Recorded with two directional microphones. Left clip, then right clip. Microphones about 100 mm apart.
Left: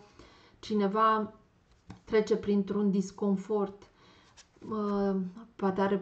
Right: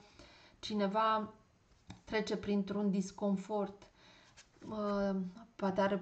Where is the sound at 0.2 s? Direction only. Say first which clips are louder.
Right 1 dB; 30° right (ahead or behind).